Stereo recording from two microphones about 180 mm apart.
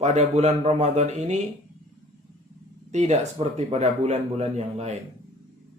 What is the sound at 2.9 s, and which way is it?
Speech, 40° right (ahead or behind).